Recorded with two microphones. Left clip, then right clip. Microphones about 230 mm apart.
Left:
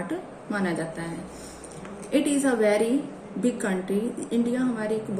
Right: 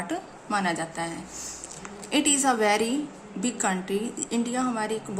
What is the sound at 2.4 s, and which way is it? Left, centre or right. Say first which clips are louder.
Speech: left 1 dB; right.